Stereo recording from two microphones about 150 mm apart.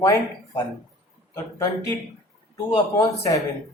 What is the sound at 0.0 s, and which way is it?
Speech, 25° left (ahead or behind).